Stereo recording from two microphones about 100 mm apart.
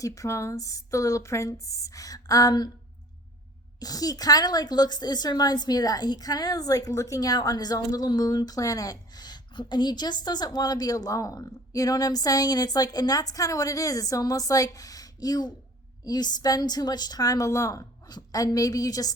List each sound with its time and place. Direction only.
0.0 s a woman's voice: 35° left (ahead or behind)
3.8 s a woman's voice: 40° left (ahead or behind)